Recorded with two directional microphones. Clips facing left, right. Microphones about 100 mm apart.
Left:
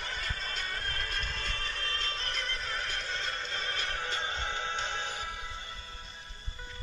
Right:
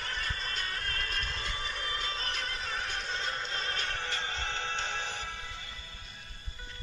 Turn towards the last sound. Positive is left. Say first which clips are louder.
# left 1 dB
turn(degrees=15)  # may be behind; listen again after turning